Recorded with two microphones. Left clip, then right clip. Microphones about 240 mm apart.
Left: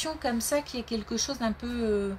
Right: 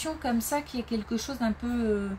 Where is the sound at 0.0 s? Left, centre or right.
Left.